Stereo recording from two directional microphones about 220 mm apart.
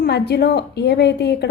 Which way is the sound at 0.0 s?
50° left (ahead or behind).